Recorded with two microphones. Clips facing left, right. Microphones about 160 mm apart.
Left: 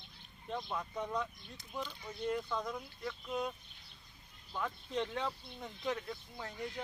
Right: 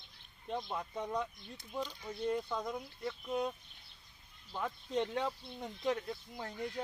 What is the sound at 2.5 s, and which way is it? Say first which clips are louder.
Speech: even; 15° right (ahead or behind).